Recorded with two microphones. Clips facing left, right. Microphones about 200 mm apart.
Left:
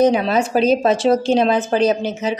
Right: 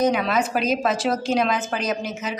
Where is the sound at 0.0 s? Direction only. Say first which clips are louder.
Left 5 dB; 30° left (ahead or behind).